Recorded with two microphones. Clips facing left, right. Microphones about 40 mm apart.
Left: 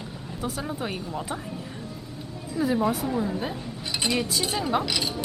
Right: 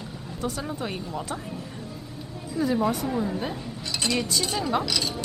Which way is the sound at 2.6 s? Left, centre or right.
Centre.